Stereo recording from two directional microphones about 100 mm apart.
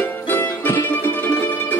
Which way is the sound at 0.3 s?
25° left (ahead or behind).